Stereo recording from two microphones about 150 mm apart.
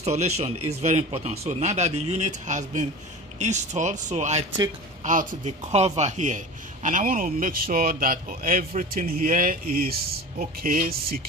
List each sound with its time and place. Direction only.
0.0 s speech: 45° right (ahead or behind)
5.7 s a man's voice: 45° right (ahead or behind); by 11.1 s 85° right